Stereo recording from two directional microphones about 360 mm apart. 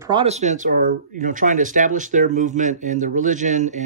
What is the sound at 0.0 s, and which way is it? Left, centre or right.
Speech, centre.